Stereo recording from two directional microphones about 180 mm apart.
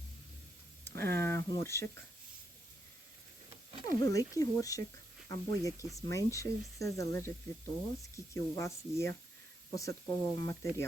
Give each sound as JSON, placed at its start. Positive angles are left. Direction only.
{"t": 0.9, "sound": "speech", "side_deg": 15}
{"t": 3.8, "sound": "speech", "side_deg": 20}